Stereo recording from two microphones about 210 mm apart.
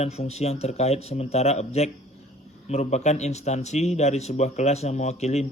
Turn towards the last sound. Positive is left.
turn(degrees=30)  # may be behind; listen again after turning